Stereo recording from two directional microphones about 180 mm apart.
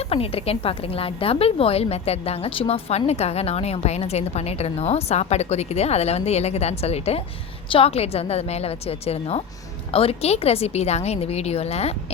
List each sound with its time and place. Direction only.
0.1 s a woman's voice: 30° left (ahead or behind)